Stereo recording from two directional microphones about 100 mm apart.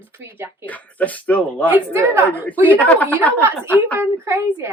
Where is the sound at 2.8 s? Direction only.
15° left (ahead or behind).